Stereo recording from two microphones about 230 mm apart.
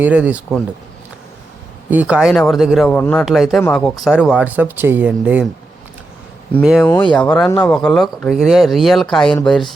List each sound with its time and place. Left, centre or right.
0.0 s speech: centre
1.9 s speech: centre
6.5 s speech: centre
6.8 s speech: centre
7.2 s speech: centre